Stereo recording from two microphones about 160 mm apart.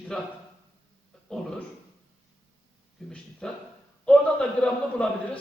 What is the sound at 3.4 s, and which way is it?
A man's voice, 5° left (ahead or behind).